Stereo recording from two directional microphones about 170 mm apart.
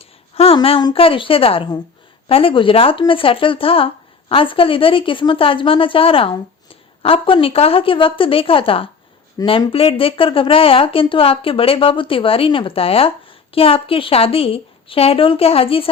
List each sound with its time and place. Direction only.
0.0 s a woman's voice: 35° left (ahead or behind)